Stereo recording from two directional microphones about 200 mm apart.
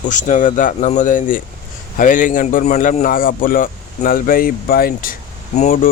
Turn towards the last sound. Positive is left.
turn(degrees=40)  # may be behind; listen again after turning